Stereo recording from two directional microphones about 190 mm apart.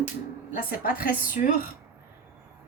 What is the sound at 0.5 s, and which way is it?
Speech, 50° left (ahead or behind).